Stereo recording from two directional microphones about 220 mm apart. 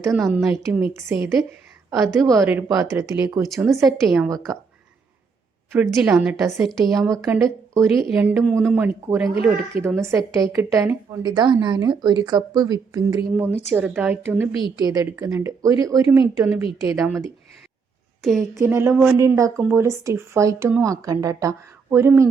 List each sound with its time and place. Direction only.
0.7 s speech: 10° right (ahead or behind)
3.5 s a woman's voice: centre (ahead or behind)
5.7 s a woman's voice: 5° right (ahead or behind)
7.4 s a woman's voice: 15° right (ahead or behind)
13.2 s speech: 5° right (ahead or behind)
18.2 s speech: centre (ahead or behind)